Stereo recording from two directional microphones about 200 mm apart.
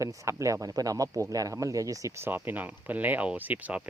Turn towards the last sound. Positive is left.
turn(degrees=-5)  # may be behind; listen again after turning